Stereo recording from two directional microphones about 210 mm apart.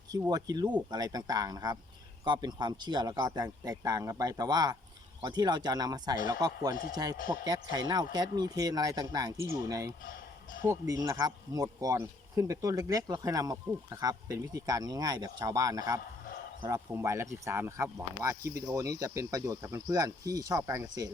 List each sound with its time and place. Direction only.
0.1 s speech: 15° right (ahead or behind)